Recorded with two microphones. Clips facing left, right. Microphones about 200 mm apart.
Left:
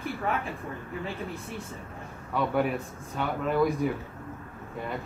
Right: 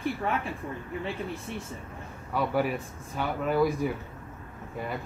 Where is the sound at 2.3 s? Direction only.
5° right (ahead or behind).